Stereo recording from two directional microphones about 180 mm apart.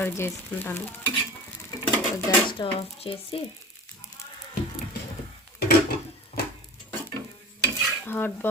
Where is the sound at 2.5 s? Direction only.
30° left (ahead or behind).